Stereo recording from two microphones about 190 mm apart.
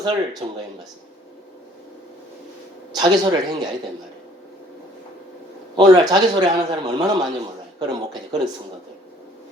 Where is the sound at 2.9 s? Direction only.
20° right (ahead or behind).